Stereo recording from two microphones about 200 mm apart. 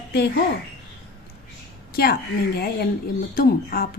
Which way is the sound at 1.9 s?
50° left (ahead or behind).